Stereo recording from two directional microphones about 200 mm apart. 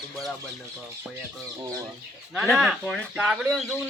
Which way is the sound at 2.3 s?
Centre (ahead or behind).